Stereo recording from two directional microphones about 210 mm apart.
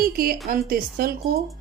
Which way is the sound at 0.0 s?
45° right (ahead or behind).